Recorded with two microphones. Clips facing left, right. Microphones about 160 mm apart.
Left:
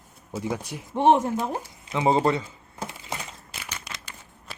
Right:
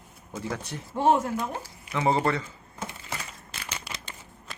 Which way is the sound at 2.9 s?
20° left (ahead or behind).